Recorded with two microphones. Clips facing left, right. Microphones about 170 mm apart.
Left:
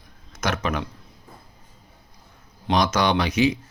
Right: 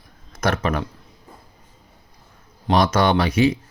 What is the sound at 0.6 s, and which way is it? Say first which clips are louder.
Speech: right 3 dB; 40° right (ahead or behind).